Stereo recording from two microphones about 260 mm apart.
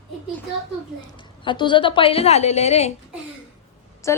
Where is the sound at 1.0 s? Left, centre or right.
Centre.